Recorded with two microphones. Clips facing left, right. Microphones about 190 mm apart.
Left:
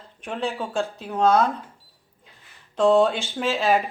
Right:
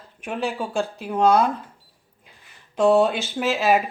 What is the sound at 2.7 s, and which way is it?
Speech, 5° right (ahead or behind).